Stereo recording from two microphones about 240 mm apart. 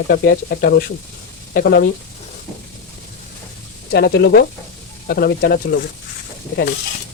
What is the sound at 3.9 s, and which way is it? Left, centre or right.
Speech, left.